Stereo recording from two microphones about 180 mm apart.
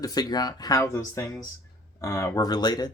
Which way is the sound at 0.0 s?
20° left (ahead or behind).